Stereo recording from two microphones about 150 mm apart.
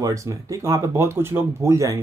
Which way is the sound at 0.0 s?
20° right (ahead or behind).